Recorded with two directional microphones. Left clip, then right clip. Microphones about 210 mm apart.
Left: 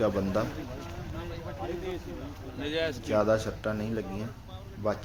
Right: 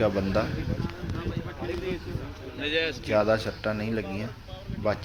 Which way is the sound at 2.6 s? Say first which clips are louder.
Right 4 dB; 65° left (ahead or behind).